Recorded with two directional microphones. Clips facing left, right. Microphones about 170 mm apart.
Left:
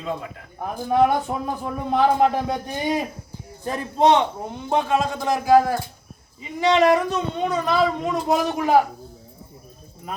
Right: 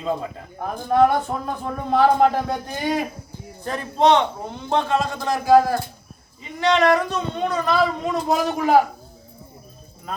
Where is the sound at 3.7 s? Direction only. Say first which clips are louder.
Even; 10° left (ahead or behind).